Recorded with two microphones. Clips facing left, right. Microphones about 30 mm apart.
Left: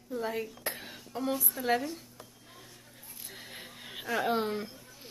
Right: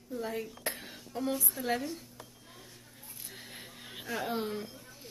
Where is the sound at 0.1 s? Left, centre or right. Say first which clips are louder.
Left 3 dB; centre.